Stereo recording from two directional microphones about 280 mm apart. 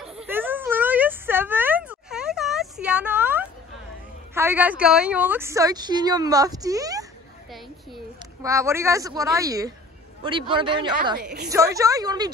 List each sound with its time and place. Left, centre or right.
0.0 s a sound: centre
4.3 s a woman's voice: centre
8.4 s a woman's voice: centre